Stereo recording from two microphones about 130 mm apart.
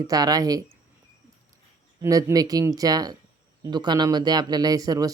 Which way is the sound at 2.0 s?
25° right (ahead or behind).